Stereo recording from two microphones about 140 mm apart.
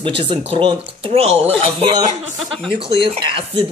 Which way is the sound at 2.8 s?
40° right (ahead or behind).